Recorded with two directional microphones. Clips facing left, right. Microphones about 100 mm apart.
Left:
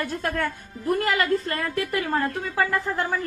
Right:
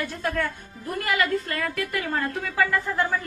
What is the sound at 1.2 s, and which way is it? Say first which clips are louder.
Speech: left 1 dB; 30° left (ahead or behind).